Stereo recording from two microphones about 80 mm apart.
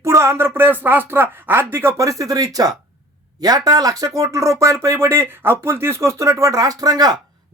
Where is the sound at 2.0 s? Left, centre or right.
Right.